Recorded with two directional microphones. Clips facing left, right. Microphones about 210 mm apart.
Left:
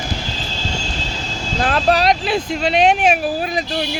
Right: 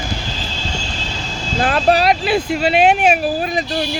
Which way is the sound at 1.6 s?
5° right (ahead or behind).